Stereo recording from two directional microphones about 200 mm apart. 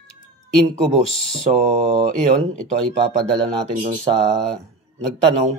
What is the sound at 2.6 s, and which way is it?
Speech, 5° left (ahead or behind).